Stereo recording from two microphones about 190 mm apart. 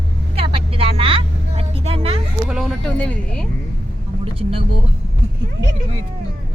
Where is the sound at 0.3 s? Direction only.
30° right (ahead or behind).